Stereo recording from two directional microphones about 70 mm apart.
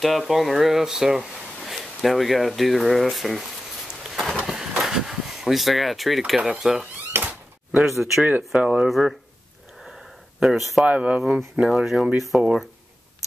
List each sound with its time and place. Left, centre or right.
0.0 s speech: centre
1.6 s a sound: centre
7.1 s door: right
7.7 s speech: centre
8.5 s speech: centre
10.4 s speech: centre
10.9 s speech: centre
12.3 s speech: centre